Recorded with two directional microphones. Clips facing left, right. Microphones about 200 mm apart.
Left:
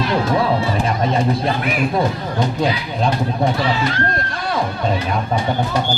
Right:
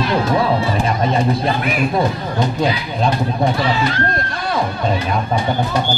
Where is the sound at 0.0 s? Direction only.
15° right (ahead or behind).